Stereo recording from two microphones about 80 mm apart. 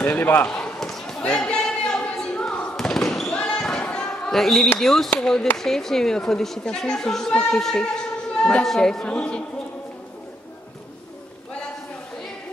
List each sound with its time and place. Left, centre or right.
0.0 s speech: left
0.5 s basketball bounce: centre
4.7 s a woman's voice: centre